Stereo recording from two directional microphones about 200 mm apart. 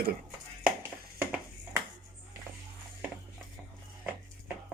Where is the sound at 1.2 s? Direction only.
10° right (ahead or behind).